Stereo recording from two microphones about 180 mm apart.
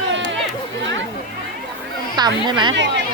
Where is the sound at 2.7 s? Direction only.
80° right.